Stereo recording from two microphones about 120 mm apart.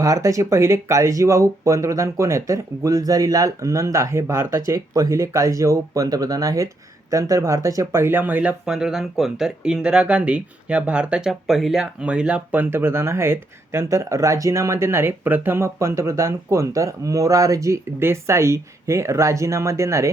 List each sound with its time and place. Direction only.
0.0 s speech: 25° right (ahead or behind)